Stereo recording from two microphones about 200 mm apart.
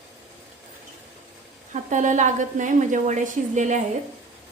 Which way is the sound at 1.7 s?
40° right (ahead or behind).